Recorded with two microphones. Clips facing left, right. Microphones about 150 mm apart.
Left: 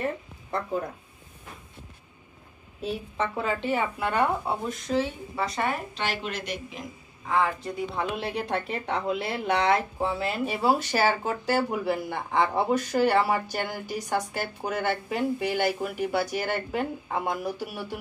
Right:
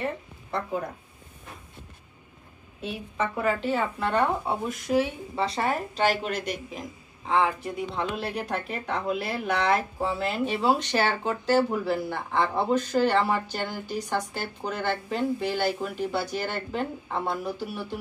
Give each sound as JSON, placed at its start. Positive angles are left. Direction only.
{"t": 2.8, "sound": "a woman's voice", "side_deg": 35}
{"t": 3.3, "sound": "speech", "side_deg": 20}
{"t": 3.8, "sound": "speech", "side_deg": 10}
{"t": 4.9, "sound": "speech", "side_deg": -15}
{"t": 5.4, "sound": "speech", "side_deg": -30}
{"t": 7.2, "sound": "speech", "side_deg": -20}
{"t": 8.2, "sound": "speech", "side_deg": 20}
{"t": 10.1, "sound": "speech", "side_deg": 10}